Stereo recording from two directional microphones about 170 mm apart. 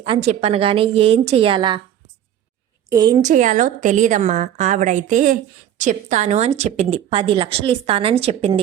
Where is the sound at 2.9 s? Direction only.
25° right (ahead or behind).